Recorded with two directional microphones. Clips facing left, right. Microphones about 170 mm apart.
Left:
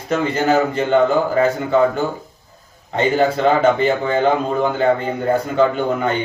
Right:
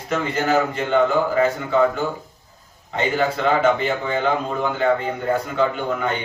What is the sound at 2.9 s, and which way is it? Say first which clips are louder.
Speech: left 5 dB; 30° left (ahead or behind).